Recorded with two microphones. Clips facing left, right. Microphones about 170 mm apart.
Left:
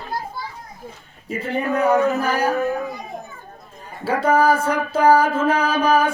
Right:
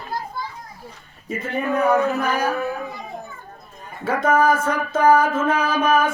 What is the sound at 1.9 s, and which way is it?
Speech, 20° left (ahead or behind).